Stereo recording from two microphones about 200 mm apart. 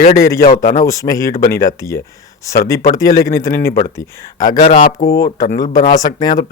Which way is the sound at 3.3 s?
15° left (ahead or behind).